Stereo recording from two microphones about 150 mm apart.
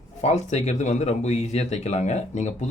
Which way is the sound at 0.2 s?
45° left (ahead or behind).